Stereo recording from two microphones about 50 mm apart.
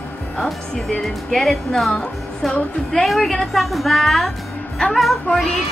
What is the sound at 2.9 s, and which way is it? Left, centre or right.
Speech, centre.